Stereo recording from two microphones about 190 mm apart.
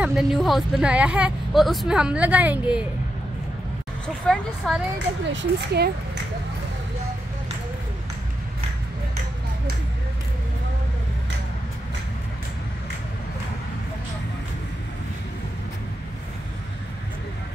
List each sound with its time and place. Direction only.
0.0 s speech: centre (ahead or behind)
4.2 s speech: 5° left (ahead or behind)
4.9 s speech: 70° right (ahead or behind)